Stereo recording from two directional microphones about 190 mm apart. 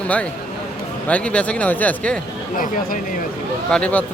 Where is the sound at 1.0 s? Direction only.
5° left (ahead or behind).